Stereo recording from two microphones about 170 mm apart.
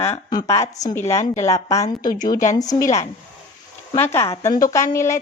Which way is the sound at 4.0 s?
15° left (ahead or behind).